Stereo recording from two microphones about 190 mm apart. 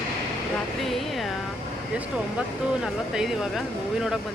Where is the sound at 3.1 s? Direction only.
Centre (ahead or behind).